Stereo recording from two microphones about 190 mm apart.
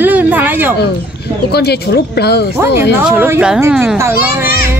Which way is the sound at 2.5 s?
10° right (ahead or behind).